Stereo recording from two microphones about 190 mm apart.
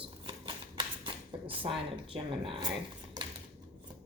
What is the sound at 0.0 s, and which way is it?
Shuffling cards, 25° right (ahead or behind).